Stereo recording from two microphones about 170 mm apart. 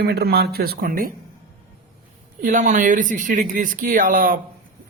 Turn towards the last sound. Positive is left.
turn(degrees=-55)  # may be behind; listen again after turning